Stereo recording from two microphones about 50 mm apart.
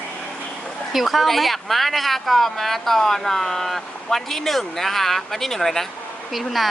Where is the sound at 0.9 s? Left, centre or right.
Centre.